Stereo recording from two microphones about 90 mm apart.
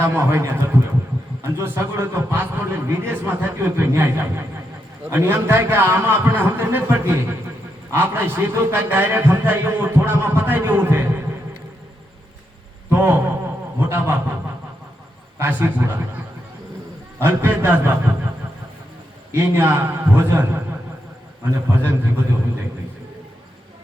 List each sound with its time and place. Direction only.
0.0 s a man's voice: 25° right (ahead or behind)
12.9 s a man's voice: 25° right (ahead or behind)
15.4 s a man's voice: 25° right (ahead or behind)
17.2 s a man's voice: 25° right (ahead or behind)
19.3 s a man's voice: 25° right (ahead or behind)
21.7 s a man's voice: 25° right (ahead or behind)